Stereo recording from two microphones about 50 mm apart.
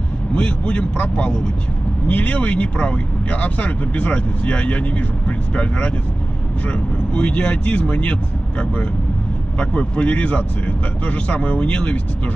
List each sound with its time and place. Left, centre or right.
0.3 s speech: left